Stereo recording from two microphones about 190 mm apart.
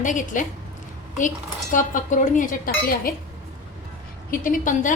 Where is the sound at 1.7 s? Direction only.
45° left (ahead or behind).